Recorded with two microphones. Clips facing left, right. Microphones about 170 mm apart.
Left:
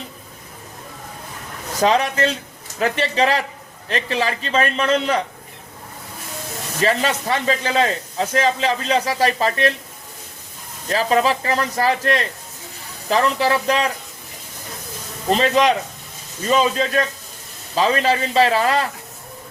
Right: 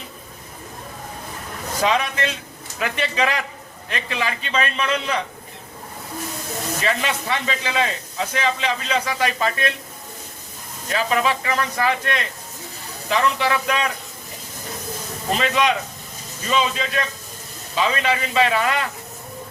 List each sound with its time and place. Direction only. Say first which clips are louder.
1.8 s speech: left 4 dB; 35° left (ahead or behind)
6.8 s speech: left 6 dB; 35° left (ahead or behind)
10.8 s speech: left 3 dB; 35° left (ahead or behind)
15.4 s speech: left 3 dB; 35° left (ahead or behind)